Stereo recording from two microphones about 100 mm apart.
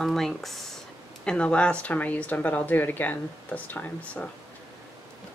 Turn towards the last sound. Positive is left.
turn(degrees=15)  # may be behind; listen again after turning